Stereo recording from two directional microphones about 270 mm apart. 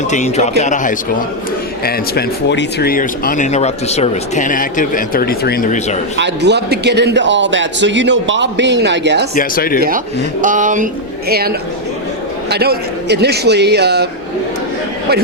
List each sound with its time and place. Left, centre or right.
0.1 s speech: left
6.1 s a man's voice: right
9.3 s speech: left
10.4 s a man's voice: right